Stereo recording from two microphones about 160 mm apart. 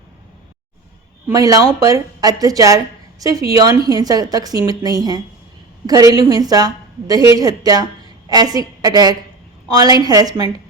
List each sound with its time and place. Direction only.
1.3 s a woman's voice: 20° right (ahead or behind)